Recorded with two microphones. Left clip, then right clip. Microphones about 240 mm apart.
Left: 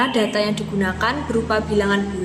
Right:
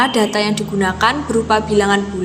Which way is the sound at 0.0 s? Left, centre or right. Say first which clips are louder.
Right 4 dB; centre.